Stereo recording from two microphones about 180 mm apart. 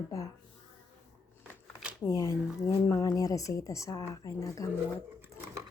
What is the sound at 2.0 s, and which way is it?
A woman's voice, 20° left (ahead or behind).